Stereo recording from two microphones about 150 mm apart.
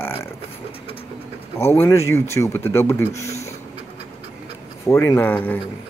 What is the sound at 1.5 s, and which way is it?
A man's voice, 15° left (ahead or behind).